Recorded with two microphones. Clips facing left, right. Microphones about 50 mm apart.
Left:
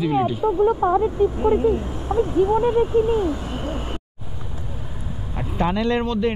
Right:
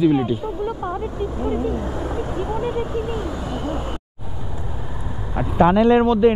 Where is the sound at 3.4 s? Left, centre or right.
Left.